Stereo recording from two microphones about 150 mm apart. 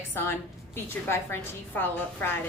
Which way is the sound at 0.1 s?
15° left (ahead or behind).